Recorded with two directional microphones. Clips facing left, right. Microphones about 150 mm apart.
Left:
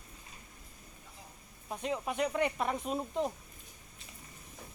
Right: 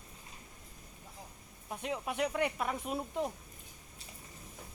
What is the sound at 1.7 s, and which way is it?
Speech, 5° right (ahead or behind).